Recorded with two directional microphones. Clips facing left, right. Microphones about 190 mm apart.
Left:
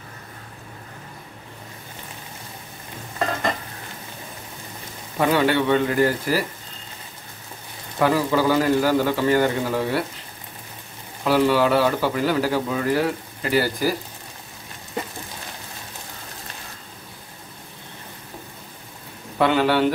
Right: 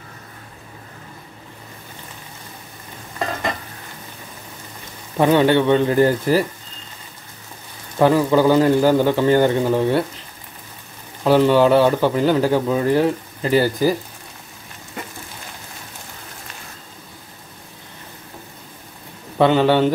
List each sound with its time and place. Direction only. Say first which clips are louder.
5.2 s speech: right 5 dB; 25° right (ahead or behind)
8.0 s speech: right 5 dB; 25° right (ahead or behind)
11.2 s speech: right 5 dB; 25° right (ahead or behind)
19.3 s speech: right 4 dB; 25° right (ahead or behind)